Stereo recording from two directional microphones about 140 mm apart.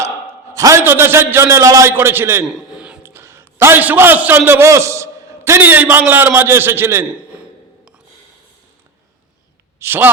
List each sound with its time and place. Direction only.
0.5 s a man's voice: 20° right (ahead or behind)
2.6 s a sound: 5° right (ahead or behind)
3.0 s a man's voice: 15° right (ahead or behind)
9.8 s a man's voice: 15° right (ahead or behind)